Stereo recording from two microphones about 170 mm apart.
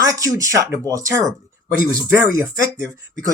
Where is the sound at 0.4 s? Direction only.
20° right (ahead or behind).